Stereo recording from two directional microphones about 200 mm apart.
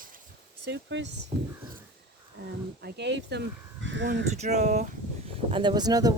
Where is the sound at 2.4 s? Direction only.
55° right (ahead or behind).